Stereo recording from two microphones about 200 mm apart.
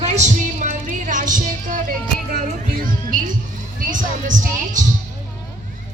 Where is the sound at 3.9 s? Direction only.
40° right (ahead or behind).